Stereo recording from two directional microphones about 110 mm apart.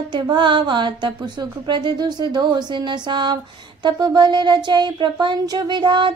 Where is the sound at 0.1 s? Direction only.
45° right (ahead or behind).